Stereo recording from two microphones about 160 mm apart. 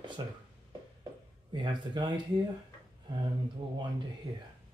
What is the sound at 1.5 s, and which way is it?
Speech, 30° right (ahead or behind).